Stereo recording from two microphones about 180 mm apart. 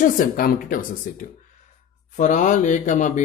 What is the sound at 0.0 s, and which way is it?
Speech, 50° left (ahead or behind).